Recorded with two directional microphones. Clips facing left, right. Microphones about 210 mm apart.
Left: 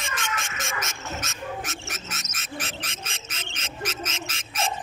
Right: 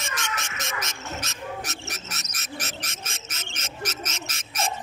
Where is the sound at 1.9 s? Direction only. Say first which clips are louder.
Left 1 dB; 40° right (ahead or behind).